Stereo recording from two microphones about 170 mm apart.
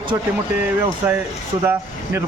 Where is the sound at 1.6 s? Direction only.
10° right (ahead or behind).